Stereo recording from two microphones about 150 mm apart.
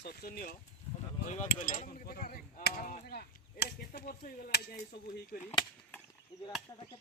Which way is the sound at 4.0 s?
80° left.